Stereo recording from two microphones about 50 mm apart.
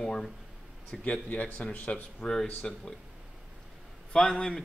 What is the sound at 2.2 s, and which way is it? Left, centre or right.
Speech, centre.